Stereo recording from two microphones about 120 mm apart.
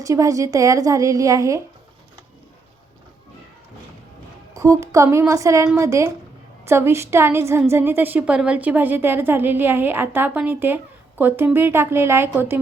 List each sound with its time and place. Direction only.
0.0 s a woman's voice: 25° right (ahead or behind)
4.5 s a woman's voice: 25° right (ahead or behind)